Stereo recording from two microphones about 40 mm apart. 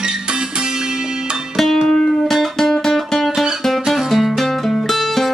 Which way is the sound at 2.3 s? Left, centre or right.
Centre.